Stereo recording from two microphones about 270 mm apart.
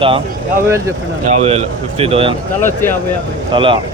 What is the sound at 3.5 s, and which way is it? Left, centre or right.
Speech, centre.